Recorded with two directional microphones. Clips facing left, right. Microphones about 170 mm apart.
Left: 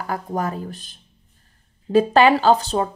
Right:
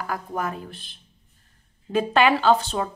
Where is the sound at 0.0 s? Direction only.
30° left (ahead or behind).